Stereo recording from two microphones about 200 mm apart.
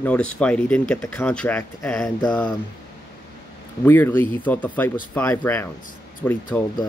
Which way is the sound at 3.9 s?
10° left (ahead or behind).